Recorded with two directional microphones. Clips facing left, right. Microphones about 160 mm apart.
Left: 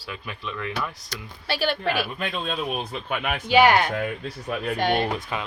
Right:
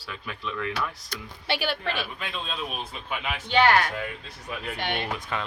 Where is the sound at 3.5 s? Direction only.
15° left (ahead or behind).